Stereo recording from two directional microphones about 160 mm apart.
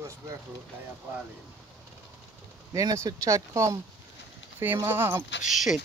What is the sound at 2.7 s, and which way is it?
Speech, 20° right (ahead or behind).